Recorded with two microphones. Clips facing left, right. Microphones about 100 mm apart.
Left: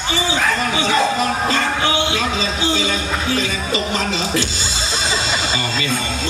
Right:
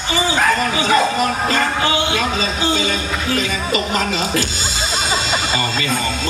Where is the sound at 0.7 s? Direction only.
40° right (ahead or behind).